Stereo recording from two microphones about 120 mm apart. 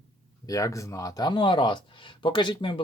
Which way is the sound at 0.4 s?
30° left (ahead or behind).